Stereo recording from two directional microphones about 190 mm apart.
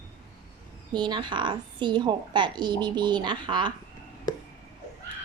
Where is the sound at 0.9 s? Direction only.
25° right (ahead or behind).